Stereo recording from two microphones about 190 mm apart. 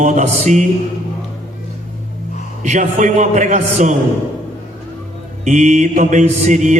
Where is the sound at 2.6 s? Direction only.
40° right (ahead or behind).